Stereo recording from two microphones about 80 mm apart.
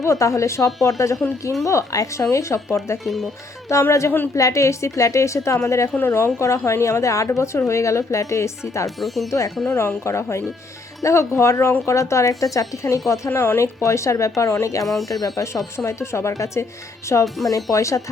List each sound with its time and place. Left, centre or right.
0.0 s a woman's voice: left
3.0 s speech: centre
3.7 s a woman's voice: left
9.0 s speech: centre
9.6 s a woman's voice: left
17.2 s speech: centre
17.5 s speech: left